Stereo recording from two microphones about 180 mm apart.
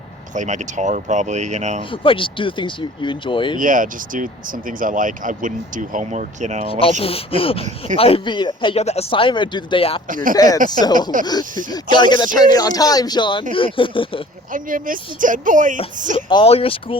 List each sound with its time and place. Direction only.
0.3 s speech: 40° right (ahead or behind)
1.9 s speech: 30° left (ahead or behind)
3.6 s speech: 50° right (ahead or behind)
6.7 s speech: 30° left (ahead or behind)
10.1 s speech: 50° right (ahead or behind)
10.3 s speech: 20° left (ahead or behind)
11.1 s speech: 45° right (ahead or behind)
11.7 s speech: 25° left (ahead or behind)
14.5 s speech: 50° right (ahead or behind)
16.1 s speech: 30° left (ahead or behind)